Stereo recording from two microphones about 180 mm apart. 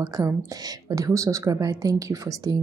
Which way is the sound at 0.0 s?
20° right (ahead or behind).